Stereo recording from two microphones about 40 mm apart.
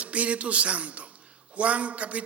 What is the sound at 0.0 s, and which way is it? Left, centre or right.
A man's voice, right.